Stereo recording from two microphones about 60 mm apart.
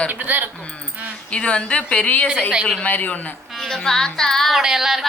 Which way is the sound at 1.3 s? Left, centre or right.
Centre.